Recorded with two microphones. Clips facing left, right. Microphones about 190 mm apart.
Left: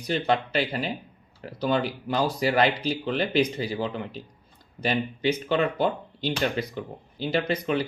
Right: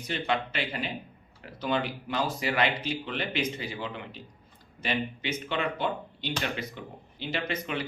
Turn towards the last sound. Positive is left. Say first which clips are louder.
# left 7 dB
turn(degrees=35)  # may be behind; listen again after turning